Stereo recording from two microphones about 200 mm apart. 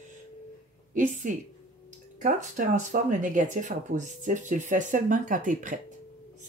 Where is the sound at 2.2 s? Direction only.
40° right (ahead or behind).